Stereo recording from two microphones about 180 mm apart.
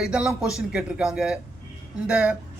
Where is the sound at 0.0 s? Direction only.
5° right (ahead or behind).